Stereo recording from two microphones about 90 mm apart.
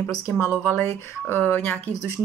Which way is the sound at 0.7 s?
25° left (ahead or behind).